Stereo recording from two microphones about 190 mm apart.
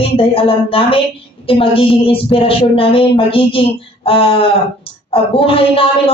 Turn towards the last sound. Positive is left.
turn(degrees=30)  # may be behind; listen again after turning